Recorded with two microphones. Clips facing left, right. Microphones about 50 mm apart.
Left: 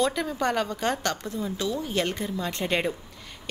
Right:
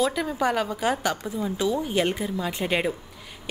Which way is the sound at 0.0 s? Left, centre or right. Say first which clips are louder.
Right 1 dB; centre.